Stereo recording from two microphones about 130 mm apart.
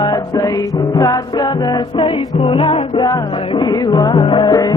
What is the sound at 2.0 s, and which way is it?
Music, 40° left (ahead or behind).